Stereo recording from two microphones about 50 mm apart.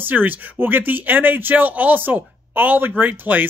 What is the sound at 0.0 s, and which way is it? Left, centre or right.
Speech, right.